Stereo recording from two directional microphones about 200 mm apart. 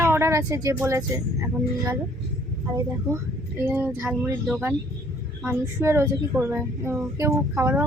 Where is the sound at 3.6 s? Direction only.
10° right (ahead or behind).